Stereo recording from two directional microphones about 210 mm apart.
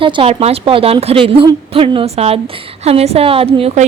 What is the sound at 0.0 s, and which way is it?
A woman's voice, 25° right (ahead or behind).